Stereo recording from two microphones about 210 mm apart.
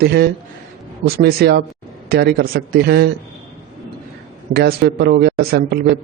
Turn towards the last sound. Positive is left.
turn(degrees=-45)  # may be behind; listen again after turning